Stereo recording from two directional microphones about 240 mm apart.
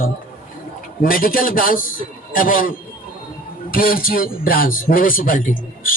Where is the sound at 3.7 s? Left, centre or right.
Left.